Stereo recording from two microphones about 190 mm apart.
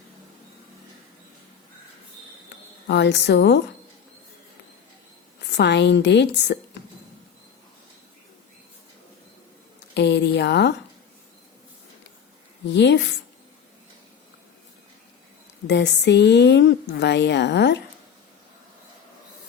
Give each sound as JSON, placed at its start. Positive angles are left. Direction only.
{"t": 2.8, "sound": "a woman's voice", "side_deg": 60}
{"t": 5.4, "sound": "a woman's voice", "side_deg": 65}
{"t": 9.9, "sound": "a woman's voice", "side_deg": 65}
{"t": 12.6, "sound": "a woman's voice", "side_deg": 65}
{"t": 15.6, "sound": "a woman's voice", "side_deg": 65}